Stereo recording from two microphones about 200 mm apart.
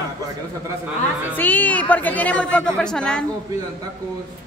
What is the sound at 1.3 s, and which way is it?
Speech, 10° left (ahead or behind).